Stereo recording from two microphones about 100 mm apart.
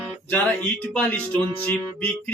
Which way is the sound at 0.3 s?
15° left (ahead or behind).